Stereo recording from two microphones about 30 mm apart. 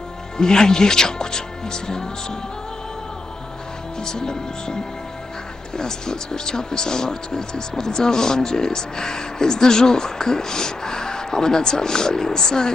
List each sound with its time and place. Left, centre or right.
0.4 s speech: left
4.0 s speech: left
5.8 s speech: left